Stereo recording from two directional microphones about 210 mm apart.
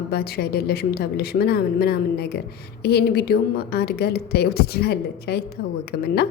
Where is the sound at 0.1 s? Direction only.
50° left (ahead or behind).